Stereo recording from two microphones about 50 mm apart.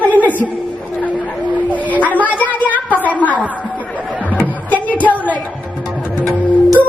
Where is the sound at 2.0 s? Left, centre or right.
Left.